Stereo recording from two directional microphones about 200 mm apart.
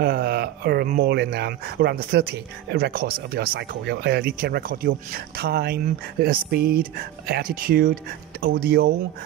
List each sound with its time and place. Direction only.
0.0 s speech: 50° right (ahead or behind)